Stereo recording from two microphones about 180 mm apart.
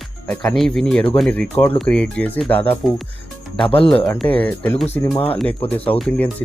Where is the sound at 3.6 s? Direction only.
30° left (ahead or behind).